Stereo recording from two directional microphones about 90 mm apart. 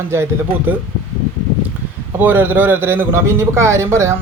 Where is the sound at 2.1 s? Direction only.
20° right (ahead or behind).